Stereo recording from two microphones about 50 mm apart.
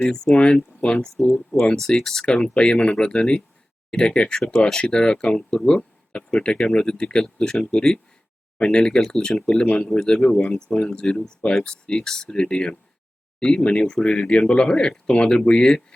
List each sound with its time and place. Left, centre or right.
0.3 s speech: centre
1.2 s speech: centre
2.0 s speech: centre
9.7 s a man's voice: centre